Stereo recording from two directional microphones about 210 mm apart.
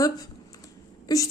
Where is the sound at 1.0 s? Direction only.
15° left (ahead or behind).